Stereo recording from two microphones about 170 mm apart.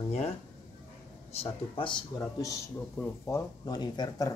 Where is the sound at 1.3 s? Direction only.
35° left (ahead or behind).